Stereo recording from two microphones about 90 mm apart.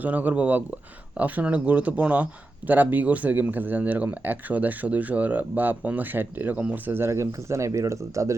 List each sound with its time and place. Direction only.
0.0 s speech: 20° right (ahead or behind); by 8.4 s 35° right (ahead or behind)